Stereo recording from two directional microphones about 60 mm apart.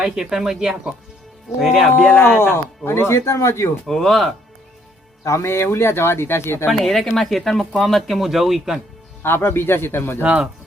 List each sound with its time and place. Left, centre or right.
0.0 s speech: centre
2.4 s speech: left
3.8 s speech: centre
5.2 s speech: left
6.7 s speech: centre
9.2 s a man's voice: left
10.2 s speech: centre